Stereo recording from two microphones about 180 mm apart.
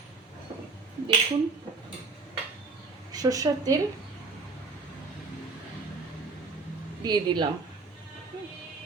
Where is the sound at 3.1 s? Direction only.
20° right (ahead or behind).